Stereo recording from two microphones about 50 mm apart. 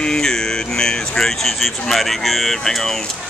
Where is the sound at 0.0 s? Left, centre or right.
Centre.